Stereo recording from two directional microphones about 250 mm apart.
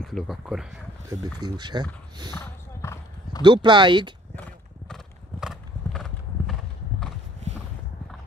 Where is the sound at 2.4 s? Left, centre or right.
Centre.